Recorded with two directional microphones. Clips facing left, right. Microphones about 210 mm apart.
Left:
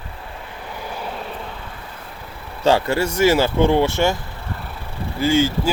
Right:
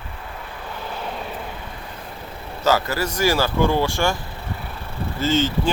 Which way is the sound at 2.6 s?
30° left (ahead or behind).